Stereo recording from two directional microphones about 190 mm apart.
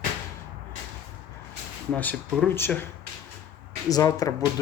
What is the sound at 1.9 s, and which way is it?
Speech, 10° left (ahead or behind).